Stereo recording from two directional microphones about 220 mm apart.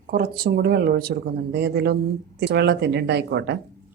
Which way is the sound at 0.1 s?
40° right (ahead or behind).